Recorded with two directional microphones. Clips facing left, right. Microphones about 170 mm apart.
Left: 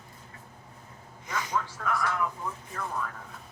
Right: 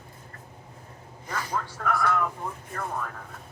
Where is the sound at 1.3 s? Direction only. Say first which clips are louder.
Even; 35° right (ahead or behind).